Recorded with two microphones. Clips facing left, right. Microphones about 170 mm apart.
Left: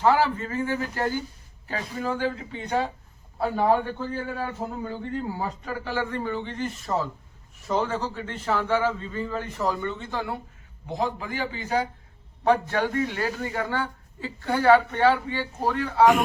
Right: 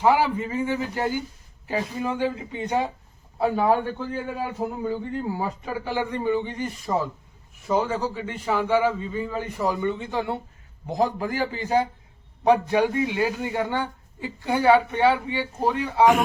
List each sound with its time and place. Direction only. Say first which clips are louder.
0.0 s a man's voice: right 1 dB; 15° right (ahead or behind)
10.9 s a man's voice: right 4 dB; 40° right (ahead or behind)
12.5 s a man's voice: right 3 dB; 15° right (ahead or behind)